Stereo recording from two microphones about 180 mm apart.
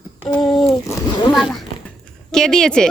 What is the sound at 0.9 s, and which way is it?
Speech, 25° left (ahead or behind).